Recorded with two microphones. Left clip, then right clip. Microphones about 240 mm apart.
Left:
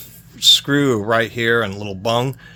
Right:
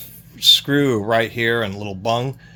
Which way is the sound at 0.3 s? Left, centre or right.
Centre.